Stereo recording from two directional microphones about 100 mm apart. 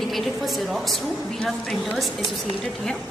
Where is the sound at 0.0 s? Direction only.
Centre (ahead or behind).